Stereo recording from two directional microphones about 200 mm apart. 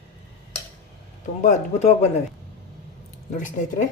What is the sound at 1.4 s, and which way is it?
Speech, 35° left (ahead or behind).